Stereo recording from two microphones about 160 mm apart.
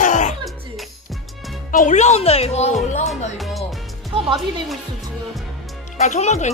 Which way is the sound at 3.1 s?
Centre (ahead or behind).